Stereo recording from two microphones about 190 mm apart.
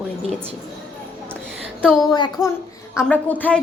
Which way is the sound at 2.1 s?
20° left (ahead or behind).